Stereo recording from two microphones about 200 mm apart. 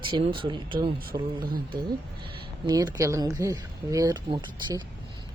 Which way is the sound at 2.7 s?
20° right (ahead or behind).